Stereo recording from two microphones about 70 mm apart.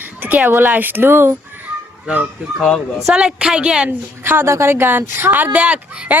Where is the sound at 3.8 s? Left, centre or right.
Right.